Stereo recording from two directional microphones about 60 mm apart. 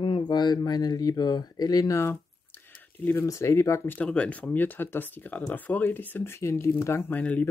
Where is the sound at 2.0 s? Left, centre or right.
Left.